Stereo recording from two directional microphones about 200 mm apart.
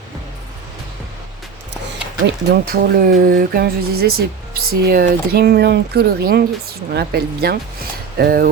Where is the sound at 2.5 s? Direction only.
50° right (ahead or behind).